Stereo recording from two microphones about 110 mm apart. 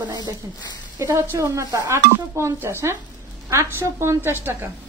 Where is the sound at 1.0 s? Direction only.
25° right (ahead or behind).